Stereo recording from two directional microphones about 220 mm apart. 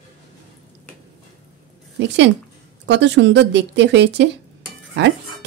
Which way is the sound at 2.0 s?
55° right (ahead or behind).